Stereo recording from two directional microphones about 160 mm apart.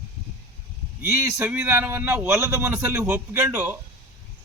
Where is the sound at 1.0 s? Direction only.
10° right (ahead or behind).